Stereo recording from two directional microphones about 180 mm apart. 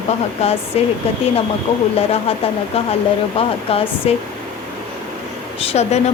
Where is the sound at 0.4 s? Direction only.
35° left (ahead or behind).